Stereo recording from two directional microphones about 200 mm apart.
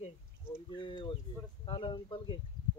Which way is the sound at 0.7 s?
25° left (ahead or behind).